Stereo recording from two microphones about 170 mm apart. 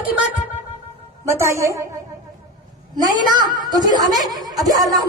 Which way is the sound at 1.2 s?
15° right (ahead or behind).